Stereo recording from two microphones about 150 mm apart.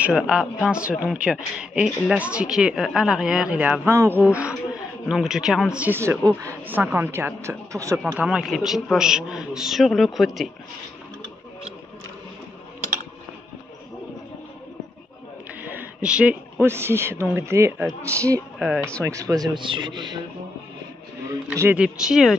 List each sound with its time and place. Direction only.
0.0 s speech: 5° right (ahead or behind)
8.0 s speech: 5° right (ahead or behind)
15.6 s a man's voice: 10° right (ahead or behind)
18.8 s speech: 5° left (ahead or behind)
19.0 s a man's voice: 20° right (ahead or behind)
21.5 s speech: 10° right (ahead or behind)